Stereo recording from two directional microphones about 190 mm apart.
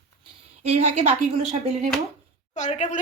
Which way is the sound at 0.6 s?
35° right (ahead or behind).